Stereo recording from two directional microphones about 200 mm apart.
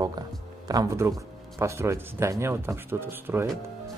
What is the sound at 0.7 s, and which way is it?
Speech, 15° right (ahead or behind).